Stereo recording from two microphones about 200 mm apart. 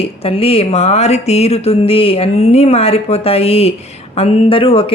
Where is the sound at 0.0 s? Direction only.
30° left (ahead or behind).